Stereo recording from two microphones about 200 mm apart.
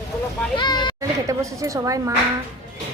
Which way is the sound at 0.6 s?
20° left (ahead or behind).